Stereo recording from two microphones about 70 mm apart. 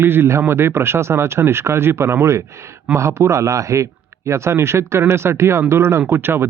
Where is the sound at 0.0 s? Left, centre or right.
Right.